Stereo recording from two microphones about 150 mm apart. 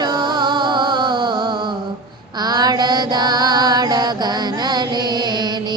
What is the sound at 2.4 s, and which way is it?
Mantra, 30° right (ahead or behind).